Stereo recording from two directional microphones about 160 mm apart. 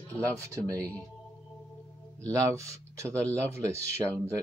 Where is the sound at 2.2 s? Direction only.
20° right (ahead or behind).